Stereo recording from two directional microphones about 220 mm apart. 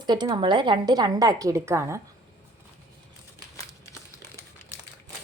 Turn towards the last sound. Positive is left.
turn(degrees=15)  # may be behind; listen again after turning